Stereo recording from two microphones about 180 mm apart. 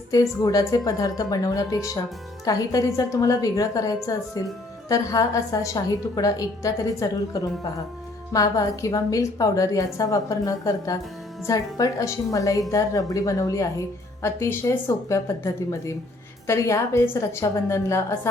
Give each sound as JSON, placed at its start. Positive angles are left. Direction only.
{"t": 0.1, "sound": "a woman's voice", "side_deg": 20}